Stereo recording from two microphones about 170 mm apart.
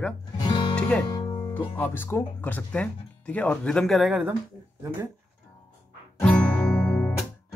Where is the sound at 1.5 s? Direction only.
10° left (ahead or behind).